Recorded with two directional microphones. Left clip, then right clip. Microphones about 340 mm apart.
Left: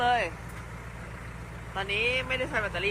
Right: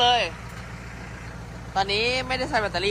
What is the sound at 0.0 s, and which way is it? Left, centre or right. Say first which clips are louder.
Vehicle: right 5 dB; centre.